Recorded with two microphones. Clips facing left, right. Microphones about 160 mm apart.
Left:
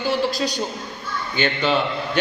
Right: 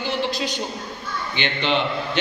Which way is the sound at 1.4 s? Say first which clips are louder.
Left 3 dB; 40° left (ahead or behind).